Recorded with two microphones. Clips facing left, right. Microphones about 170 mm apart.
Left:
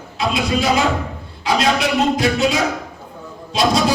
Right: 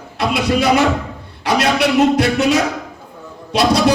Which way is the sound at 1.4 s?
70° right (ahead or behind).